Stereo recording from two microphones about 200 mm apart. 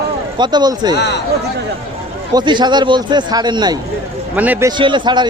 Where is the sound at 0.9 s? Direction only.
55° left (ahead or behind).